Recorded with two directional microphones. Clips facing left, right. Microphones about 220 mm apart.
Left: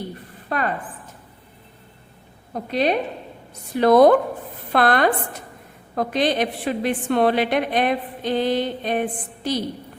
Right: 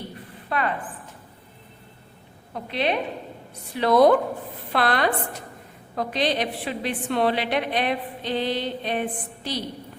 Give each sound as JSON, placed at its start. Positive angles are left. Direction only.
{"t": 0.5, "sound": "a woman's voice", "side_deg": 40}
{"t": 2.5, "sound": "a woman's voice", "side_deg": 40}